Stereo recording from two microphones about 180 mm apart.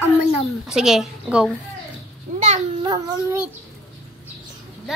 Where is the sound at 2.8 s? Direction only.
20° right (ahead or behind).